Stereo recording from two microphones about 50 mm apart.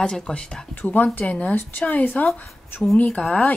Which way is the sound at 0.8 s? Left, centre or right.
Left.